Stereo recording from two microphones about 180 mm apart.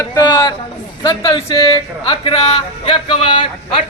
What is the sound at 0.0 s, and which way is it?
A man's voice, 20° left (ahead or behind).